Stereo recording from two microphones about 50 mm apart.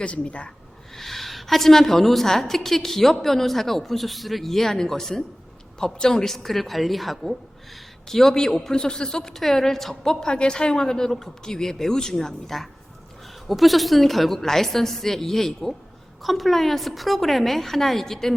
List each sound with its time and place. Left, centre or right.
0.0 s speech: left
0.9 s a woman's voice: centre